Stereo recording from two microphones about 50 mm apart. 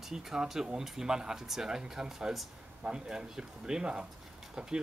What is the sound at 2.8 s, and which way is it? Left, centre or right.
Speech, centre.